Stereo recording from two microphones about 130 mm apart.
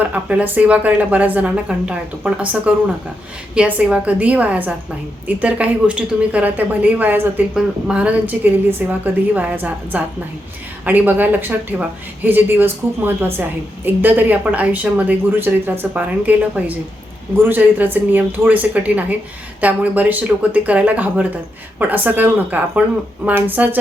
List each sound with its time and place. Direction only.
0.1 s a woman's voice: 10° right (ahead or behind)